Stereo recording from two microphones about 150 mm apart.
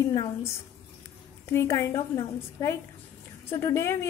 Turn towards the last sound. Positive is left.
turn(degrees=20)  # may be behind; listen again after turning